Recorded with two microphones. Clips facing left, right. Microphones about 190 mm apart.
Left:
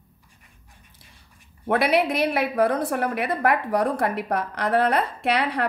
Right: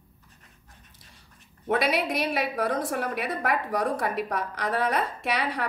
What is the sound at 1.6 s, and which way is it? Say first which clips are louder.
A woman's voice: left 4 dB; 60° left (ahead or behind).